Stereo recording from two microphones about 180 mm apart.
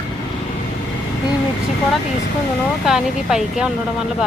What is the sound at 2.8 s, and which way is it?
Speech, 5° right (ahead or behind).